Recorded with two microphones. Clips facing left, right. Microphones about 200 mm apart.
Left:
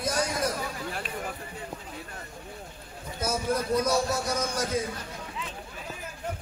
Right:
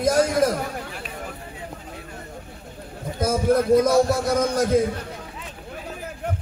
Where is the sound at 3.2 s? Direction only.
55° right (ahead or behind).